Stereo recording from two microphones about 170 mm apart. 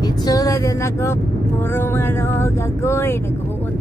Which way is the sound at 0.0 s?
20° left (ahead or behind).